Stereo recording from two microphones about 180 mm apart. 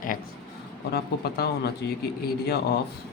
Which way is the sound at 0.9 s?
60° left (ahead or behind).